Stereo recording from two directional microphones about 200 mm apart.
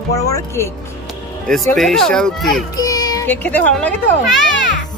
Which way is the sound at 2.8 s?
20° left (ahead or behind).